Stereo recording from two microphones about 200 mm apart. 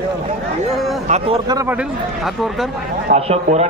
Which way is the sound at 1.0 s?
35° right (ahead or behind).